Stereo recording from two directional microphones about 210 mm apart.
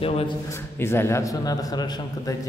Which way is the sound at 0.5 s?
10° left (ahead or behind).